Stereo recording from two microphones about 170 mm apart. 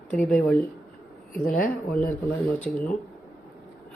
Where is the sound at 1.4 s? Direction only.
55° left (ahead or behind).